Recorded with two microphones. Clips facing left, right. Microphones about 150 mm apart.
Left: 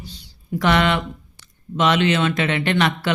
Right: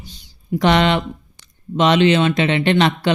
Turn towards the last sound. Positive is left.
turn(degrees=-20)  # may be behind; listen again after turning